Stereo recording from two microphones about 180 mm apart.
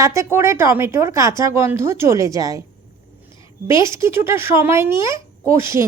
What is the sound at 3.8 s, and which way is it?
Speech, 15° right (ahead or behind).